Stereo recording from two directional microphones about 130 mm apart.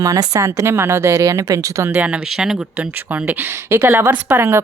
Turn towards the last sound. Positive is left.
turn(degrees=-20)  # may be behind; listen again after turning